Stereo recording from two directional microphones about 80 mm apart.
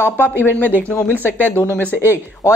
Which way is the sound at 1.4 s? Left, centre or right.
Right.